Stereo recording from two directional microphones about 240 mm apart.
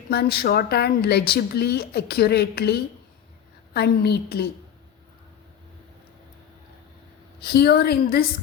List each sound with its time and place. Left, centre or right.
0.1 s a woman's voice: left
3.8 s a woman's voice: left
7.4 s a woman's voice: left